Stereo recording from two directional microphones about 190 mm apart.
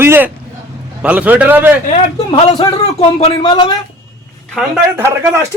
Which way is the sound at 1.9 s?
35° left (ahead or behind).